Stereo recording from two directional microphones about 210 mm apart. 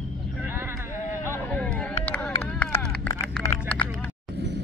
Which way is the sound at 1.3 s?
10° left (ahead or behind).